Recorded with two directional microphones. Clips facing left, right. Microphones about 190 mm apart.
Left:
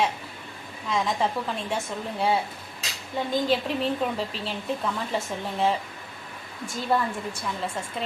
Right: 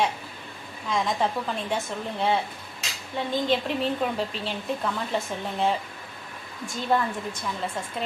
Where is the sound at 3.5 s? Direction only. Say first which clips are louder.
Even; centre (ahead or behind).